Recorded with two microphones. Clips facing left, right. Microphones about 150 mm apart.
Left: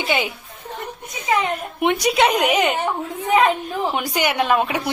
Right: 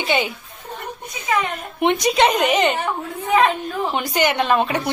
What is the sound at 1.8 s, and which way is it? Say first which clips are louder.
A woman's voice: right 1 dB; 10° left (ahead or behind).